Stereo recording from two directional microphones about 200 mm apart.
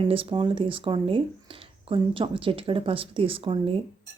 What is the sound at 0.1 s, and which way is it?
Speech, 25° right (ahead or behind).